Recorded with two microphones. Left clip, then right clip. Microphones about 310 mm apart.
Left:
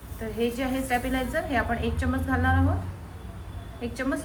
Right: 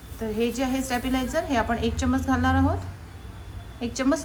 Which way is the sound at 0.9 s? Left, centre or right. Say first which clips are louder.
Even; centre.